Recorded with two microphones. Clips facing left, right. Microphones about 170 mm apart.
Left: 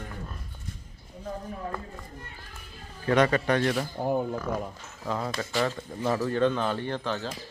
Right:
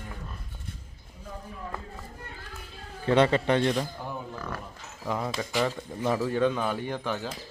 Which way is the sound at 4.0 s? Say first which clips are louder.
Left 10 dB; 50° left (ahead or behind).